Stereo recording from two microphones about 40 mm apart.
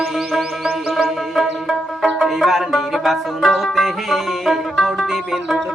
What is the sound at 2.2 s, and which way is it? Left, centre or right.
Music, centre.